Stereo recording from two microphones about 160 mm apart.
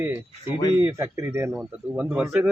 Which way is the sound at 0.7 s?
20° right (ahead or behind).